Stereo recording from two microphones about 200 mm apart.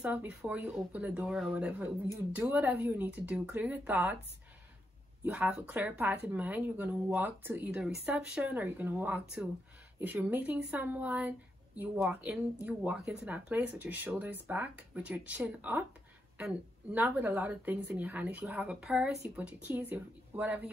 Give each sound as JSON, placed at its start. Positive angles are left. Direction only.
{"t": 0.0, "sound": "speech", "side_deg": -5}
{"t": 5.2, "sound": "speech", "side_deg": -10}